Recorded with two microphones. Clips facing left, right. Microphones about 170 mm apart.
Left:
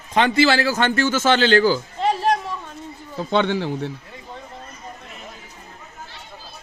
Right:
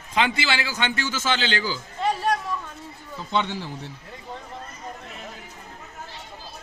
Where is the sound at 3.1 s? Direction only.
65° left (ahead or behind).